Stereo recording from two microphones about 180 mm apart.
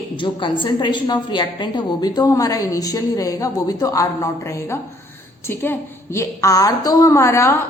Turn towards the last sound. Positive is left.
turn(degrees=15)  # may be behind; listen again after turning